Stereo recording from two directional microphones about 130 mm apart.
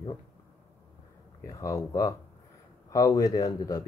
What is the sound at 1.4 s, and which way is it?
Speech, 25° left (ahead or behind).